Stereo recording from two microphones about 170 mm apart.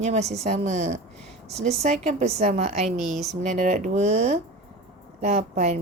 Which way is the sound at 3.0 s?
40° right (ahead or behind).